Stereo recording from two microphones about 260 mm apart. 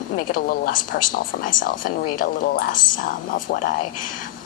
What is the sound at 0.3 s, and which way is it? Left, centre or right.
Speech, left.